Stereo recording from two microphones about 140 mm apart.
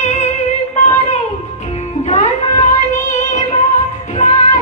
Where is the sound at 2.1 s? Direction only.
55° left (ahead or behind).